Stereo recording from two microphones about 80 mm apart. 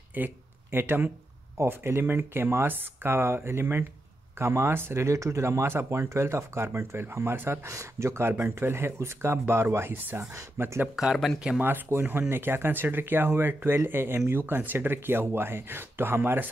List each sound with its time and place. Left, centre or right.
0.1 s speech: right
11.3 s speech: centre
11.6 s speech: right